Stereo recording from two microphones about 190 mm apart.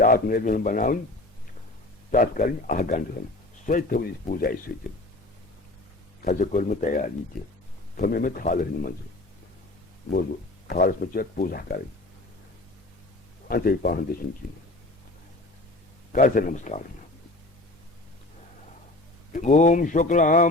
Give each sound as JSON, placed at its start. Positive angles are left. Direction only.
{"t": 0.0, "sound": "speech", "side_deg": 50}
{"t": 2.0, "sound": "speech", "side_deg": 45}
{"t": 6.2, "sound": "speech", "side_deg": 40}
{"t": 7.3, "sound": "speech", "side_deg": 0}
{"t": 7.9, "sound": "speech", "side_deg": 50}
{"t": 10.7, "sound": "speech", "side_deg": 50}
{"t": 13.5, "sound": "speech", "side_deg": 50}
{"t": 16.1, "sound": "speech", "side_deg": 45}
{"t": 19.3, "sound": "speech", "side_deg": 40}